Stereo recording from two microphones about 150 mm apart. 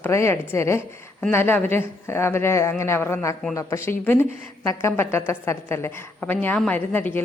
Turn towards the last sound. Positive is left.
turn(degrees=10)  # may be behind; listen again after turning